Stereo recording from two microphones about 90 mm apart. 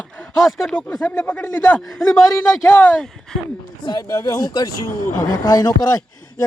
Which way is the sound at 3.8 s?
50° left (ahead or behind).